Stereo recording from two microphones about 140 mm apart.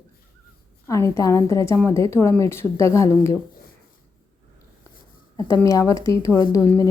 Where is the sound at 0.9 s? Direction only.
20° left (ahead or behind).